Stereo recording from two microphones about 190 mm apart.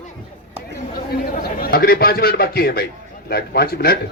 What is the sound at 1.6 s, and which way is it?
A man's voice, 50° left (ahead or behind).